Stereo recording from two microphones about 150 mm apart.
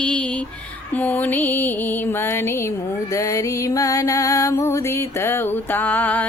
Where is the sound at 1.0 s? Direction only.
10° left (ahead or behind).